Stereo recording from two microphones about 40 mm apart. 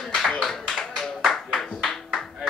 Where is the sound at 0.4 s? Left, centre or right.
Centre.